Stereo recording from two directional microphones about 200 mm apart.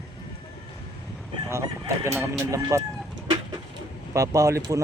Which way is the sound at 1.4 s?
15° right (ahead or behind).